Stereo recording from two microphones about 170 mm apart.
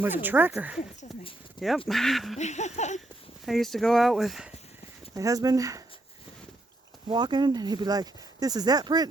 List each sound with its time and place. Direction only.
0.0 s speech: 10° right (ahead or behind)
1.6 s speech: 25° left (ahead or behind)
1.9 s speech: centre (ahead or behind)
2.4 s laughter: 45° left (ahead or behind)
3.4 s speech: centre (ahead or behind)
5.1 s speech: 20° right (ahead or behind)
7.1 s speech: 25° right (ahead or behind)